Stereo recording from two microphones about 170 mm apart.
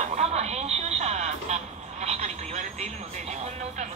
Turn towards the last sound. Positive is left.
turn(degrees=-40)  # may be behind; listen again after turning